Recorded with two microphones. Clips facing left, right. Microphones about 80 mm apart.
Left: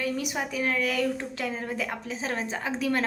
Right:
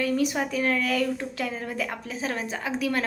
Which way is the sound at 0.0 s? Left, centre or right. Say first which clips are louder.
Right 5 dB; centre.